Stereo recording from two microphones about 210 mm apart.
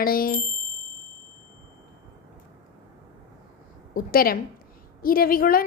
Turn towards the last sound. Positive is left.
turn(degrees=45)  # may be behind; listen again after turning